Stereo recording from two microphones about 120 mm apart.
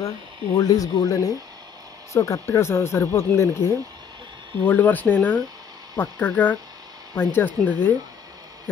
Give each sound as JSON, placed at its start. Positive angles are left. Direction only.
{"t": 0.0, "sound": "speech", "side_deg": 30}